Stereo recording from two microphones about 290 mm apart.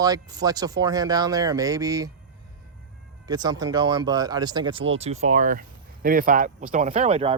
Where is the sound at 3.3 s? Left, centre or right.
Centre.